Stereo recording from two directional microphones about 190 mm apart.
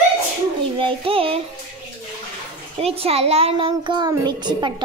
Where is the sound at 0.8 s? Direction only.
30° right (ahead or behind).